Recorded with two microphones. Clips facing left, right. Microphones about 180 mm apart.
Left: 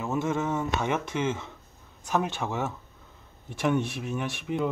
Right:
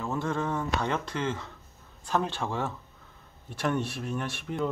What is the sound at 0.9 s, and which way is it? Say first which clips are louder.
Speech: left 2 dB; 10° left (ahead or behind).